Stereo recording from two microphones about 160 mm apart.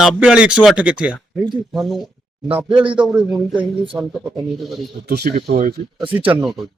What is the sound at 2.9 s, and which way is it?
Speech, 5° right (ahead or behind).